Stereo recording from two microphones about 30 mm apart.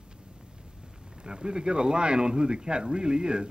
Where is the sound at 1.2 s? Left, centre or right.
Right.